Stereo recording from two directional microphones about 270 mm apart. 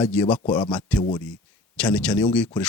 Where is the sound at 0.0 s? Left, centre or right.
Centre.